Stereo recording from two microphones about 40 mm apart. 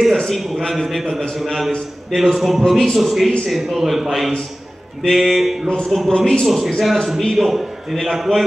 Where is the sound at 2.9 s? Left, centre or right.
Centre.